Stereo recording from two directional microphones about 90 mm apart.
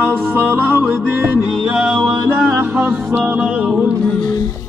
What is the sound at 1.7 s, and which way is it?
Music, 10° right (ahead or behind).